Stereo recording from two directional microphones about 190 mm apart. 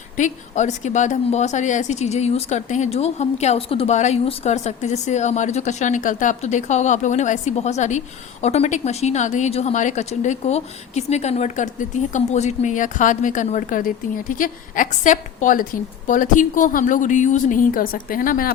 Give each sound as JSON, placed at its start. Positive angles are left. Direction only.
{"t": 0.2, "sound": "a woman's voice", "side_deg": 40}